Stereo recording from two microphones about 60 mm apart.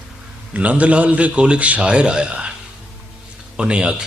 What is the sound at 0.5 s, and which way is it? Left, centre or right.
A man's voice, right.